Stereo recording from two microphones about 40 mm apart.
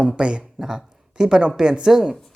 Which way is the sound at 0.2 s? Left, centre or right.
Right.